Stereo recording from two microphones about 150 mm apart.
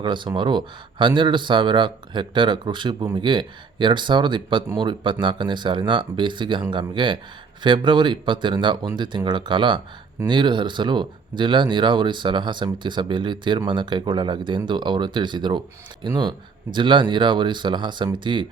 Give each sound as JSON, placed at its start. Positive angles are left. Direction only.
{"t": 0.0, "sound": "speech", "side_deg": -30}